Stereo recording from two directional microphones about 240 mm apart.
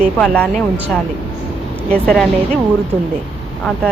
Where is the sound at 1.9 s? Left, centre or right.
Centre.